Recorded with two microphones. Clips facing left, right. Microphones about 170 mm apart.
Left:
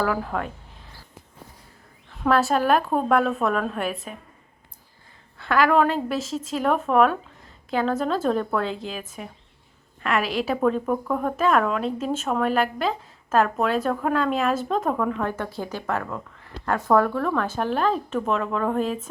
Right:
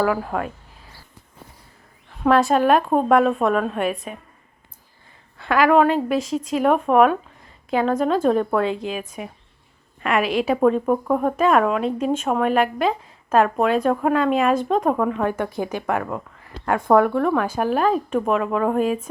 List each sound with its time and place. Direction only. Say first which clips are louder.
0.0 s a woman's voice: right 3 dB; 5° right (ahead or behind)
2.2 s a woman's voice: right 4 dB; centre (ahead or behind)
3.2 s a woman's voice: right 4 dB; 35° right (ahead or behind)
3.5 s a woman's voice: right 4 dB; 5° right (ahead or behind)
5.5 s a woman's voice: right 3 dB; 5° right (ahead or behind)
10.9 s speech: right 4 dB; 20° right (ahead or behind)
11.3 s a woman's voice: right 2 dB; 5° right (ahead or behind)
14.8 s speech: right 4 dB; 10° right (ahead or behind)
16.4 s a sound: right 3 dB; 10° right (ahead or behind)
16.9 s speech: right 4 dB; 15° right (ahead or behind)